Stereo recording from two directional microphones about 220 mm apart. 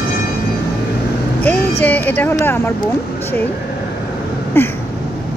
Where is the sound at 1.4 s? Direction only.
5° left (ahead or behind).